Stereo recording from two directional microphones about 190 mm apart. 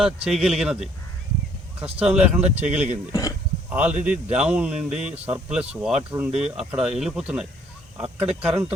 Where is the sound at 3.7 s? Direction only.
5° right (ahead or behind).